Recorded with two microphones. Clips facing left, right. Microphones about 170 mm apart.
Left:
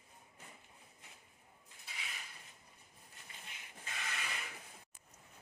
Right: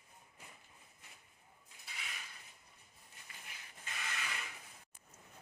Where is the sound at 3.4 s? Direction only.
20° left (ahead or behind).